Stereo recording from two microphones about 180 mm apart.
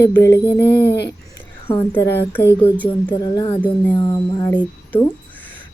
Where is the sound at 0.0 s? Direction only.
15° left (ahead or behind).